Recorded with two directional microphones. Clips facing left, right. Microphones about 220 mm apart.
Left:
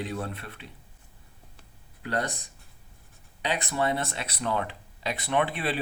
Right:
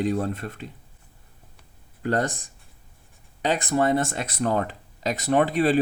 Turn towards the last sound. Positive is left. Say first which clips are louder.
# right 7 dB
turn(degrees=-40)  # may be behind; listen again after turning